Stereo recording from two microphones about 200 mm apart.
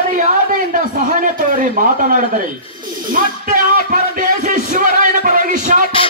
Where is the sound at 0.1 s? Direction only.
40° right (ahead or behind).